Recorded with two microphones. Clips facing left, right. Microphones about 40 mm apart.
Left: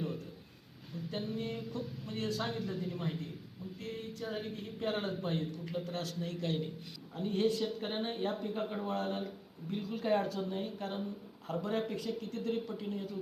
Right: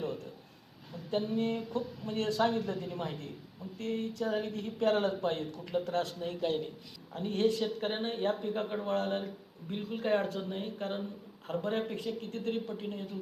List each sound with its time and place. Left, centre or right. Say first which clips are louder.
1.1 s speech: right 7 dB; right